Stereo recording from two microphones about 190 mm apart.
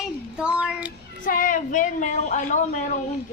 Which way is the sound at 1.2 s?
45° left (ahead or behind).